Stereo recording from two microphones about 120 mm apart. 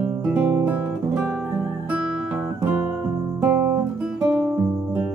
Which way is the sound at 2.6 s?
15° right (ahead or behind).